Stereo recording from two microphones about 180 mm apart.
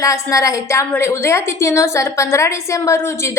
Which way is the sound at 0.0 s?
20° left (ahead or behind).